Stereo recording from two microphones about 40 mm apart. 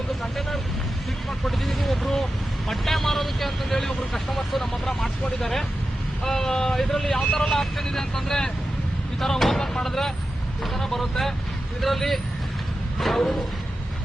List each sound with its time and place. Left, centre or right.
0.2 s vehicle: centre
1.5 s speech: centre
7.4 s speech: centre
13.0 s a sound: centre